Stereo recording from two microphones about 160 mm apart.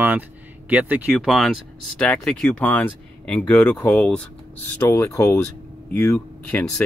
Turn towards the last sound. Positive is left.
turn(degrees=10)  # may be behind; listen again after turning